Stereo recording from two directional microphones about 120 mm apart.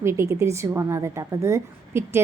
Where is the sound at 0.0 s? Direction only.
20° right (ahead or behind).